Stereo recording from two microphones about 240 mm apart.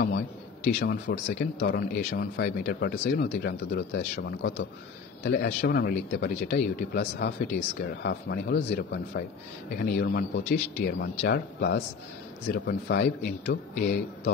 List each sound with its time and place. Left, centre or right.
0.7 s speech: left